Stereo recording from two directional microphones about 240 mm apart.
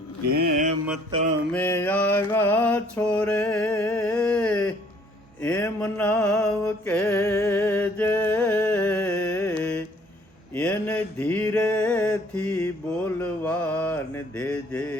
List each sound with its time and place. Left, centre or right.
0.3 s mantra: right
1.5 s mantra: centre
5.4 s music: centre
10.5 s a sound: centre